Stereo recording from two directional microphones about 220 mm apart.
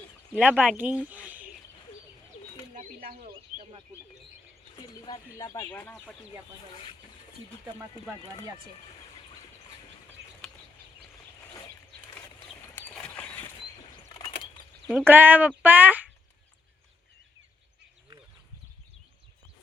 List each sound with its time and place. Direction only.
0.3 s speech: 5° right (ahead or behind)
2.7 s bird: 40° right (ahead or behind)
4.8 s speech: 15° left (ahead or behind)
7.8 s speech: 10° right (ahead or behind)
10.4 s bird: centre (ahead or behind)
12.7 s a sound: 5° left (ahead or behind)
14.8 s speech: 5° right (ahead or behind)